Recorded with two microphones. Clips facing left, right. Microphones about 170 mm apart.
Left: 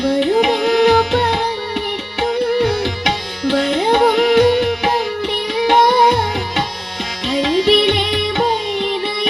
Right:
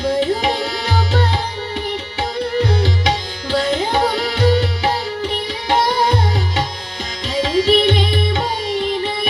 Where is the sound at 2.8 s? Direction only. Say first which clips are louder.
Right 1 dB; 65° left (ahead or behind).